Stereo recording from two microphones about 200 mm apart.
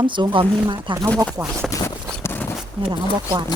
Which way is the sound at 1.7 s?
15° left (ahead or behind).